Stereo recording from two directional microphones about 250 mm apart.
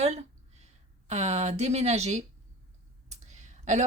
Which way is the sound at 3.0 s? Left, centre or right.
Right.